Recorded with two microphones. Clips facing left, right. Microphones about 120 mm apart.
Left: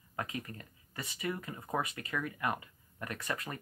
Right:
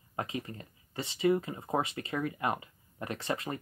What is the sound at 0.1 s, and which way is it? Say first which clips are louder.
Speech: right 3 dB; 25° right (ahead or behind).